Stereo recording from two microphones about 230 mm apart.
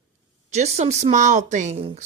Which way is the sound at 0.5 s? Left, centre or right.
Right.